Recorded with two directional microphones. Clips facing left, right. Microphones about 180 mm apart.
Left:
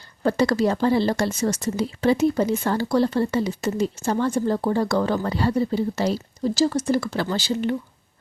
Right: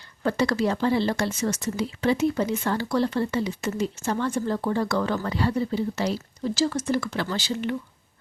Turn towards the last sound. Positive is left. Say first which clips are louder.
# left 4 dB
turn(degrees=35)  # may be behind; listen again after turning